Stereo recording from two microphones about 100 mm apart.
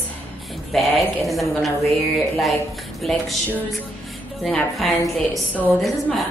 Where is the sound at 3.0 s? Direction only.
5° left (ahead or behind).